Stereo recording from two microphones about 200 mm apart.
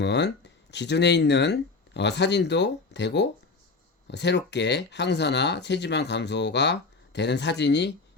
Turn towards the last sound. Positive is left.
turn(degrees=60)  # may be behind; listen again after turning